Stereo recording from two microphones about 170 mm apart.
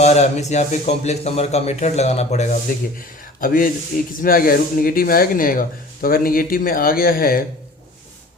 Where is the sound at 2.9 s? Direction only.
55° left (ahead or behind).